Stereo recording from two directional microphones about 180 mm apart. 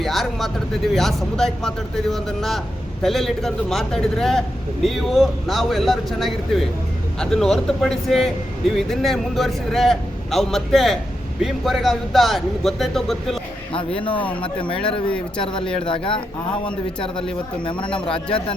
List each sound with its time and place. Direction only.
0.0 s a man's voice: centre (ahead or behind)
13.7 s speech: 30° left (ahead or behind)